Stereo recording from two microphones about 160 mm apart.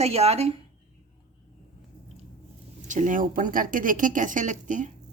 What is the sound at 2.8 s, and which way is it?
Speech, 50° right (ahead or behind).